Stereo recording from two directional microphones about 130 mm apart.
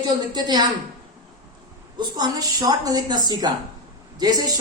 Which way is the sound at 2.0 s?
30° right (ahead or behind).